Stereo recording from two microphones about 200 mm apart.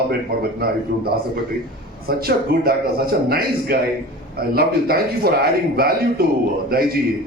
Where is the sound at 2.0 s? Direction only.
50° right (ahead or behind).